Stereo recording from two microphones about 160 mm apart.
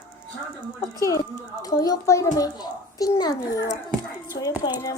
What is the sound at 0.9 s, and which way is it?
Speech, 20° left (ahead or behind).